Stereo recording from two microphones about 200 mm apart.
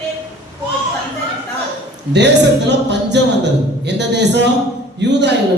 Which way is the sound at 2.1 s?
60° right (ahead or behind).